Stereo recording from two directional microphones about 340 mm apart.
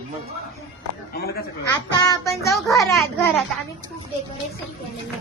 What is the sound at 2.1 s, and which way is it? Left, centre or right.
A child's voice, centre.